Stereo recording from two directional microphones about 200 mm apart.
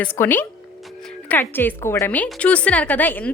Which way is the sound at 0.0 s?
10° left (ahead or behind).